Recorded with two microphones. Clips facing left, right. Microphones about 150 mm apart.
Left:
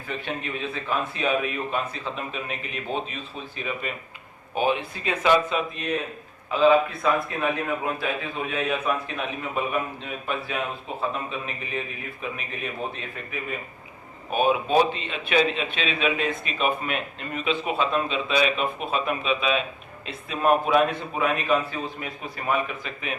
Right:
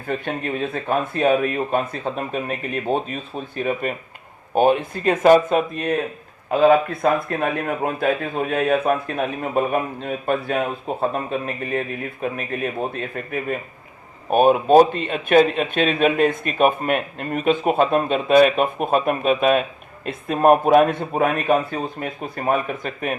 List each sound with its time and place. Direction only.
0.0 s speech: 50° right (ahead or behind)